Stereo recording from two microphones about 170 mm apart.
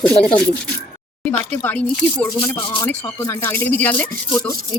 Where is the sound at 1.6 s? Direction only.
10° left (ahead or behind).